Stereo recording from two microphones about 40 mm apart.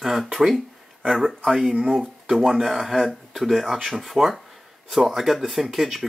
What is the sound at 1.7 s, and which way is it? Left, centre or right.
Speech, right.